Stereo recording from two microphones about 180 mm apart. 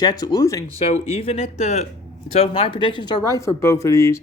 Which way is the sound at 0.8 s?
35° left (ahead or behind).